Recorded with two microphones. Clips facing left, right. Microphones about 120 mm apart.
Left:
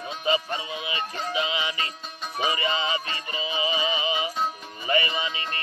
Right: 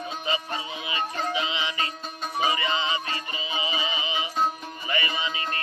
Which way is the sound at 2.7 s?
25° right (ahead or behind).